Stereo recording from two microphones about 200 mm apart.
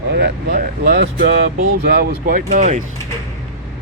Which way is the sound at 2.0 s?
45° right (ahead or behind).